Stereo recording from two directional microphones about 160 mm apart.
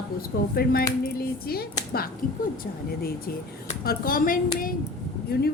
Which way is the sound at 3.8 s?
65° left (ahead or behind).